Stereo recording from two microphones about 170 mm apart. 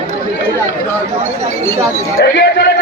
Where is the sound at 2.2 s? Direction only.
80° left.